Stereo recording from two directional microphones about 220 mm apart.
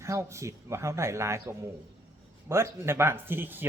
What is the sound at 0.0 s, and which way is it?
Speech, 15° right (ahead or behind).